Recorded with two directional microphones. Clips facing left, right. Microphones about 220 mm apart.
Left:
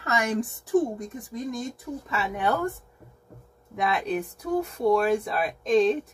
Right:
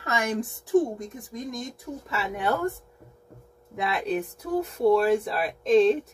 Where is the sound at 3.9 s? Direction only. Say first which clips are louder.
Right 3 dB; centre (ahead or behind).